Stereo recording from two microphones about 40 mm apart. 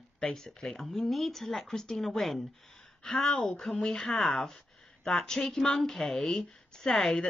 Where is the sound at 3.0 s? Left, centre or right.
Centre.